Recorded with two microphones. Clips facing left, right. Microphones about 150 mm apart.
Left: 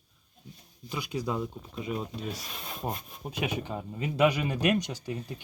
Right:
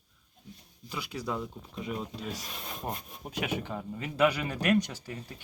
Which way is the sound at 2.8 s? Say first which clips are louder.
Left 4 dB; 15° left (ahead or behind).